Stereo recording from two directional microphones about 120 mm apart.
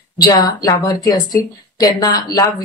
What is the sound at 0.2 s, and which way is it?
A woman's voice, 35° left (ahead or behind).